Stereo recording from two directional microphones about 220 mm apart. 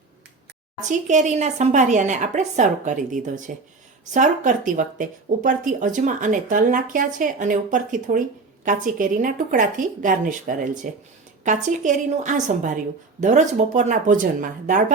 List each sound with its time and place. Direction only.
0.8 s speech: 35° right (ahead or behind)